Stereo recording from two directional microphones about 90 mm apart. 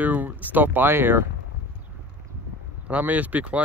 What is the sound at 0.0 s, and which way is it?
Speech, 20° right (ahead or behind).